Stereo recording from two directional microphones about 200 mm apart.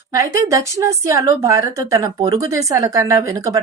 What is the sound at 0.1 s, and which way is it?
Speech, 15° right (ahead or behind).